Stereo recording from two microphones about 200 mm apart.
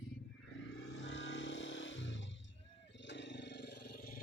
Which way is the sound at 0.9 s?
70° left (ahead or behind).